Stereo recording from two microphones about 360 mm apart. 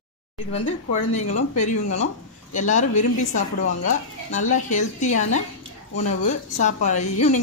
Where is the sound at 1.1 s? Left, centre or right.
Centre.